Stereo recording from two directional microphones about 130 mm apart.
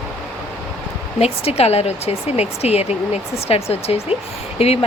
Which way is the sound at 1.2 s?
50° left (ahead or behind).